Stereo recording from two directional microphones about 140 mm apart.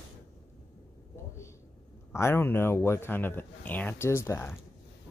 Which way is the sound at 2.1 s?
15° left (ahead or behind).